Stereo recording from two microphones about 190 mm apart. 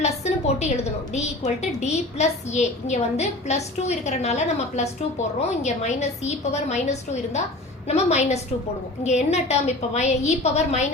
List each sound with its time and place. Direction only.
0.0 s a woman's voice: 35° left (ahead or behind)
1.8 s a woman's voice: 35° left (ahead or behind)